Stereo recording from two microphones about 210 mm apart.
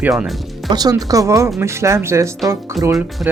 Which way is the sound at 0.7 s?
20° right (ahead or behind).